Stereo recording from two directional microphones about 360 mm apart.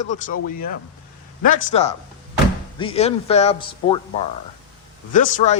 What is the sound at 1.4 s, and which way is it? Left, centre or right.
A man's voice, left.